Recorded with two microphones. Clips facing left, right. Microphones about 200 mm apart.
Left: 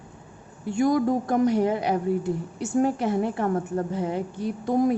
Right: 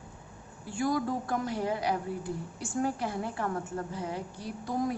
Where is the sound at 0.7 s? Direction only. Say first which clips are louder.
Left 8 dB; 20° left (ahead or behind).